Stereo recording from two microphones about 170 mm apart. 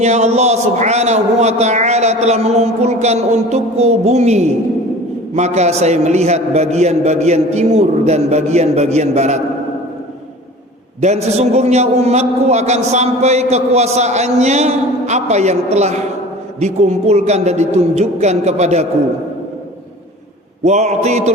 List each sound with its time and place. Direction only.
0.0 s a man's voice: 40° right (ahead or behind)
11.0 s a man's voice: 40° right (ahead or behind)
20.7 s a man's voice: 40° right (ahead or behind)